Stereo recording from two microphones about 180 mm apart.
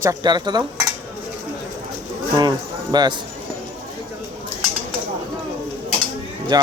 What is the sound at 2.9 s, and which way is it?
Speech, 25° right (ahead or behind).